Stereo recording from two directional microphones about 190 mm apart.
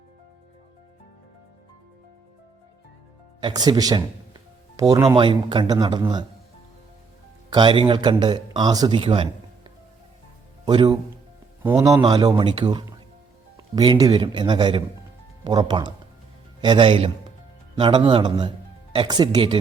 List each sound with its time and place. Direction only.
3.4 s speech: 20° right (ahead or behind)
7.5 s speech: 25° right (ahead or behind)
11.6 s speech: 10° right (ahead or behind)
12.0 s speech: 25° right (ahead or behind)